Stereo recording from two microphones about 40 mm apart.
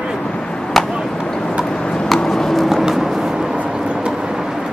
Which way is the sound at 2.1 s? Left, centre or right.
Centre.